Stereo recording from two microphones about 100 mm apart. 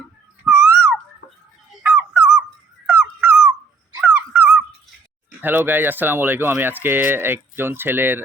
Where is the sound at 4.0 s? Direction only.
15° right (ahead or behind).